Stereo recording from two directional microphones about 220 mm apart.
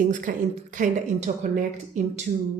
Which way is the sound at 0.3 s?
40° right (ahead or behind).